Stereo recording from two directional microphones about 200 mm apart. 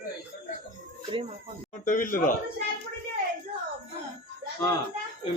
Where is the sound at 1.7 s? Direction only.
40° left (ahead or behind).